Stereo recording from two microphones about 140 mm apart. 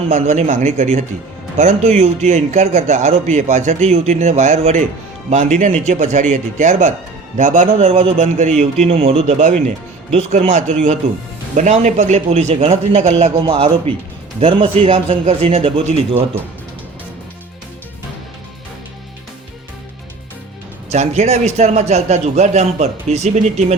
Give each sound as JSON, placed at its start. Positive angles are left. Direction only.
{"t": 0.1, "sound": "a man's voice", "side_deg": -55}
{"t": 13.3, "sound": "a man's voice", "side_deg": -40}
{"t": 20.9, "sound": "a man's voice", "side_deg": -50}